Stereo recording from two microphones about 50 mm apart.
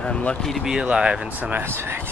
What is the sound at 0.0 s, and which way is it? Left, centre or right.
Speech, left.